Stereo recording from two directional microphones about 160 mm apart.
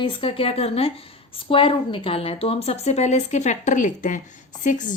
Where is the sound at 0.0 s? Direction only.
30° left (ahead or behind).